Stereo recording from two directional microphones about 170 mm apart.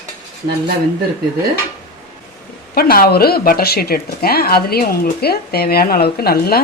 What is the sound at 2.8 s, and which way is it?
Speech, 60° left (ahead or behind).